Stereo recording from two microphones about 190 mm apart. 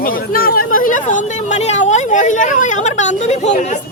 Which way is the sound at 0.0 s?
50° left (ahead or behind).